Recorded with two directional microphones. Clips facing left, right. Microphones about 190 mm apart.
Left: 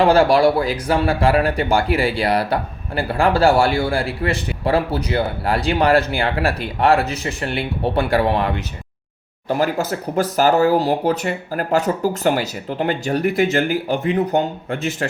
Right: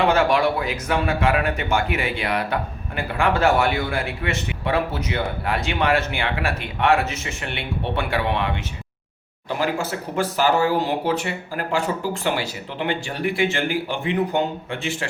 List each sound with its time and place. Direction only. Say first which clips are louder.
0.0 s speech: left 5 dB; 35° left (ahead or behind)